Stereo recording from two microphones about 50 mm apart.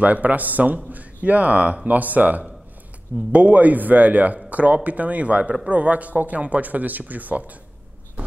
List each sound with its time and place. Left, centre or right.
0.0 s a man's voice: right